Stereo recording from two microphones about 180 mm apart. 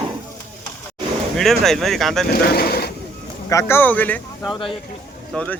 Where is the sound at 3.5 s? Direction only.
15° left (ahead or behind).